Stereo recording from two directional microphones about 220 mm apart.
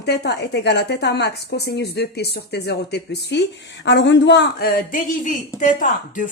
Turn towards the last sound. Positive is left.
turn(degrees=35)  # may be behind; listen again after turning